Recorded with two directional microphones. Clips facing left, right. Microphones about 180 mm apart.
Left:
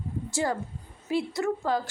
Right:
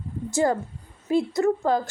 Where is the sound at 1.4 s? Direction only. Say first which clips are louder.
Right 6 dB; 45° right (ahead or behind).